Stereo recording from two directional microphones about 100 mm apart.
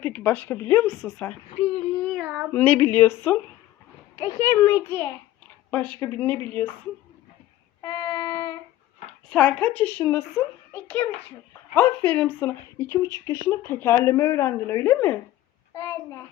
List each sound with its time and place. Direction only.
0.1 s a child's voice: 15° left (ahead or behind)
1.5 s speech: 85° left
2.1 s child singing: 5° right (ahead or behind)
2.5 s speech: 15° left (ahead or behind)
4.1 s a child's voice: 35° left (ahead or behind)
5.7 s a child's voice: 15° left (ahead or behind)
7.9 s child singing: 25° left (ahead or behind)
8.3 s a sound: 35° left (ahead or behind)
9.3 s a child's voice: 10° left (ahead or behind)
13.0 s a child's voice: 40° left (ahead or behind); by 15.2 s 20° left (ahead or behind)
15.7 s a sound: 25° left (ahead or behind)